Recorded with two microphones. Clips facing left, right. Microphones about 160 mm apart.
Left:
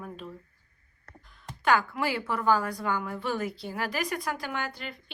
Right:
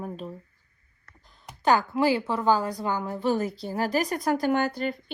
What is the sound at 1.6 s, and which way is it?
A woman's voice, 30° right (ahead or behind).